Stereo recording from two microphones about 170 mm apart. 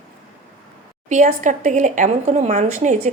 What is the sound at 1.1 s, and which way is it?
Speech, 45° right (ahead or behind).